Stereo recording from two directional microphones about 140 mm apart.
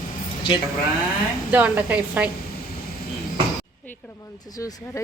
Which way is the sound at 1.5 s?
10° right (ahead or behind).